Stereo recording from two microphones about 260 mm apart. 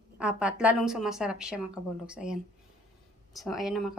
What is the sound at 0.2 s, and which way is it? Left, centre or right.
Speech, centre.